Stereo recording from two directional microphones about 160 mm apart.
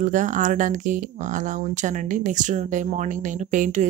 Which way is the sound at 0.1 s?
50° right (ahead or behind).